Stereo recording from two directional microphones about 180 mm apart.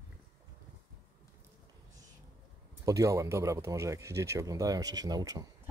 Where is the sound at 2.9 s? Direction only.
15° right (ahead or behind).